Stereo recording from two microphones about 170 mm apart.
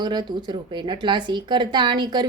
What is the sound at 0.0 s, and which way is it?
A woman's voice, 25° right (ahead or behind).